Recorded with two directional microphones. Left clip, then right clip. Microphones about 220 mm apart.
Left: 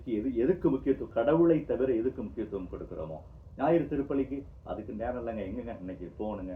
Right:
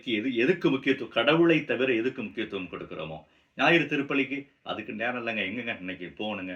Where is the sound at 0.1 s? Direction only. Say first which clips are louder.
Right 3 dB; 15° right (ahead or behind).